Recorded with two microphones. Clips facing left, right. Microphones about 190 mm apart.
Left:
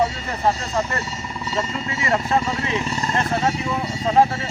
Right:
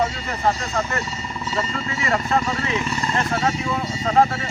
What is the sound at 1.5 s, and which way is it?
Speech, 20° left (ahead or behind).